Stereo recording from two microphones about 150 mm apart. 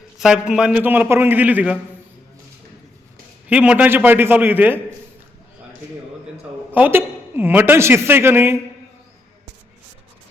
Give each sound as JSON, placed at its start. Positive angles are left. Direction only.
{"t": 0.2, "sound": "a woman's voice", "side_deg": -5}
{"t": 3.5, "sound": "a woman's voice", "side_deg": -10}
{"t": 6.7, "sound": "a woman's voice", "side_deg": -10}